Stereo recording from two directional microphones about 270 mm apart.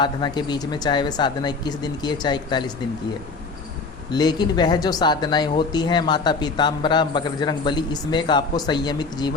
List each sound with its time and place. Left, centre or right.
0.0 s speech: centre
4.1 s speech: centre